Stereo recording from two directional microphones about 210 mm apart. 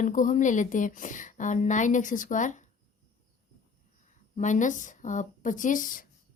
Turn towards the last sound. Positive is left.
turn(degrees=40)  # may be behind; listen again after turning